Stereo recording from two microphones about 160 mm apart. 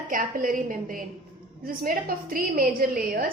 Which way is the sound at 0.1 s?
60° right (ahead or behind).